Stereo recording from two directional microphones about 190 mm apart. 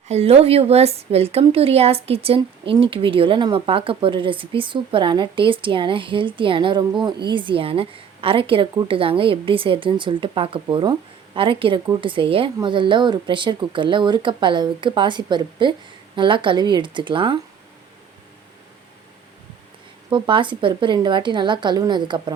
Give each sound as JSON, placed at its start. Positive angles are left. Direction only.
{"t": 0.1, "sound": "a woman's voice", "side_deg": -35}
{"t": 20.1, "sound": "a woman's voice", "side_deg": -25}